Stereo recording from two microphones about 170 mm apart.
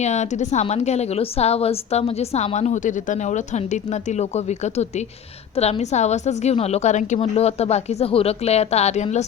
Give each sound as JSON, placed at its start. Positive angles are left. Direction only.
{"t": 0.0, "sound": "a woman's voice", "side_deg": 40}